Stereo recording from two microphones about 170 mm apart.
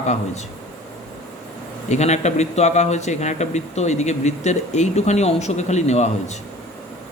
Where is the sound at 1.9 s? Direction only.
40° left (ahead or behind).